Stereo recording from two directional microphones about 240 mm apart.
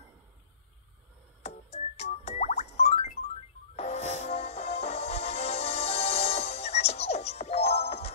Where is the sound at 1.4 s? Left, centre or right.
Left.